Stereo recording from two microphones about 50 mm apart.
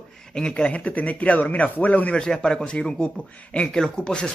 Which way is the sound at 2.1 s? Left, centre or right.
Centre.